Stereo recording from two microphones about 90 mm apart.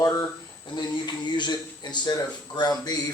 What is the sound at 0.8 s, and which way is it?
Speech, 55° left (ahead or behind).